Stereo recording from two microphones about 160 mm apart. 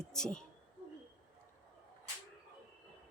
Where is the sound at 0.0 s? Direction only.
5° left (ahead or behind).